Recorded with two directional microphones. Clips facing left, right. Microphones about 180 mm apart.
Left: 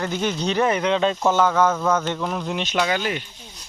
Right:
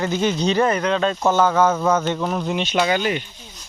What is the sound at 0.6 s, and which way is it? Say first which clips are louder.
Speech: left 2 dB; 10° left (ahead or behind).